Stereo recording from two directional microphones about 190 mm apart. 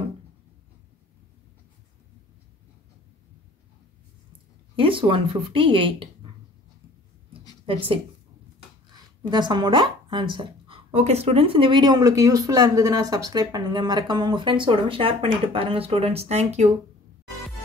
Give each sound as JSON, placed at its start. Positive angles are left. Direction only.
{"t": 4.7, "sound": "speech", "side_deg": -25}
{"t": 9.3, "sound": "speech", "side_deg": -25}